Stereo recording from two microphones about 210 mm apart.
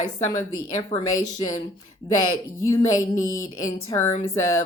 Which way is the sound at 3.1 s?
70° left (ahead or behind).